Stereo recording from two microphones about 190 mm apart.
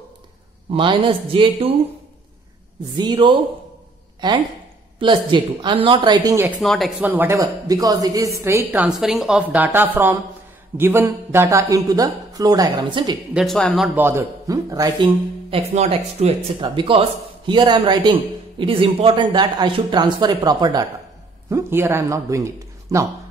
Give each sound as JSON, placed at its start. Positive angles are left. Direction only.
{"t": 0.7, "sound": "a woman's voice", "side_deg": -25}
{"t": 3.0, "sound": "a woman's voice", "side_deg": -25}
{"t": 6.6, "sound": "speech", "side_deg": 0}
{"t": 7.1, "sound": "a woman's voice", "side_deg": -10}
{"t": 13.3, "sound": "speech", "side_deg": 0}
{"t": 13.9, "sound": "a woman's voice", "side_deg": -10}
{"t": 15.5, "sound": "a woman's voice", "side_deg": -30}